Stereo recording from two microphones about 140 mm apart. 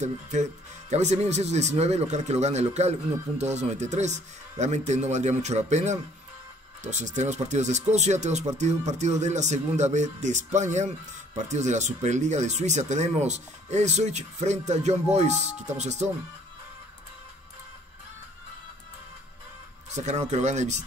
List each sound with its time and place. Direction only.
0.0 s speech: 55° right (ahead or behind)
19.9 s speech: 55° right (ahead or behind)